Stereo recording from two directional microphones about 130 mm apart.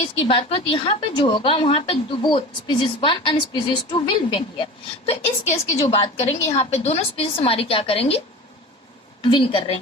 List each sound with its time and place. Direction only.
0.2 s a woman's voice: 45° left (ahead or behind)
5.5 s a woman's voice: 50° left (ahead or behind)
9.2 s a woman's voice: 40° left (ahead or behind)